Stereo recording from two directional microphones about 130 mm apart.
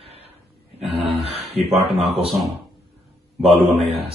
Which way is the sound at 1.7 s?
50° right (ahead or behind).